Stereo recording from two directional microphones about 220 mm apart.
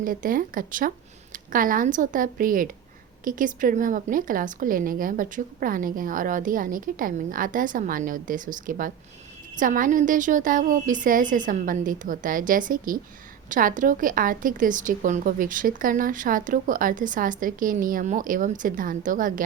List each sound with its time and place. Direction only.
0.0 s a woman's voice: 40° right (ahead or behind)